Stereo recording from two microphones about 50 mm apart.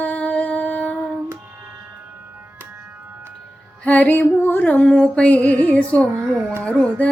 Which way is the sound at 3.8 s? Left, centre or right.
Left.